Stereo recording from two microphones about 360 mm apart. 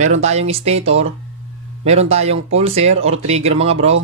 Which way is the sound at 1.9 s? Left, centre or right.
Centre.